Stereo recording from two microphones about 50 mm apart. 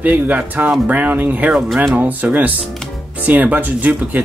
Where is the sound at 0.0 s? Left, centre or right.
Right.